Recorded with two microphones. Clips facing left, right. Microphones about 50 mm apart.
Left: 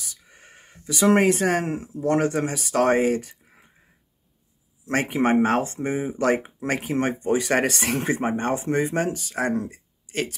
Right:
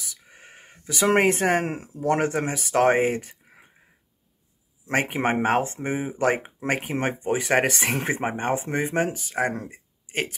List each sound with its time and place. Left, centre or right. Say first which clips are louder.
0.2 s speech: right 2 dB; right
5.2 s speech: left 4 dB; right
9.7 s a sound: left 2 dB; right